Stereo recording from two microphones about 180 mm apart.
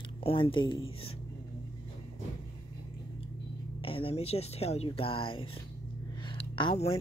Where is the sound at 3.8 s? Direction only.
30° left (ahead or behind).